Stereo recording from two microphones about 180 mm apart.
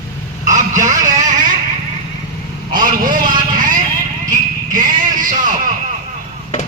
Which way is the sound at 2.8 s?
50° right (ahead or behind).